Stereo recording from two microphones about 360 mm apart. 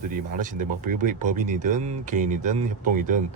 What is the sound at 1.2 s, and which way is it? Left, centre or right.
Speech, right.